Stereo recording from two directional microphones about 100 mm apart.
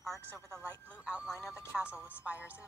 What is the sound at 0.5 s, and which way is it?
A woman's voice, 20° right (ahead or behind).